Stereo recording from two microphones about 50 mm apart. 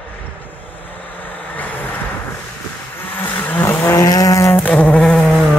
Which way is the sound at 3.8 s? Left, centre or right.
Left.